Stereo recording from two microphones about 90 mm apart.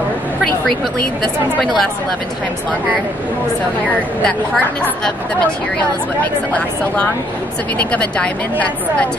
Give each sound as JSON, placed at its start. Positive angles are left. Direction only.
{"t": 1.2, "sound": "a woman's voice", "side_deg": 0}
{"t": 3.8, "sound": "a woman's voice", "side_deg": 15}
{"t": 7.8, "sound": "a woman's voice", "side_deg": 15}